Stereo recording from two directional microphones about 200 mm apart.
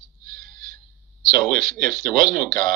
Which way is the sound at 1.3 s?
45° right (ahead or behind).